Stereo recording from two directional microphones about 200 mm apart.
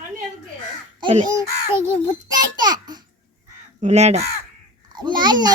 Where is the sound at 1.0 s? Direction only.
30° right (ahead or behind).